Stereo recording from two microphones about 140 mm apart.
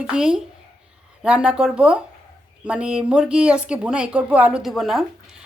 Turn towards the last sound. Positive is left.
turn(degrees=0)  # may be behind; listen again after turning